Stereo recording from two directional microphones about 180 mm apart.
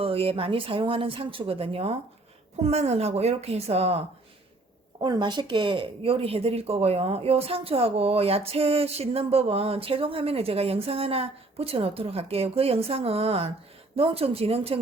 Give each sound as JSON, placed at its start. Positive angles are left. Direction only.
{"t": 0.0, "sound": "speech", "side_deg": -30}
{"t": 4.9, "sound": "speech", "side_deg": -25}